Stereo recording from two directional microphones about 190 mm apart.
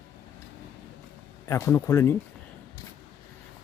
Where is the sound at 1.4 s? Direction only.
15° left (ahead or behind).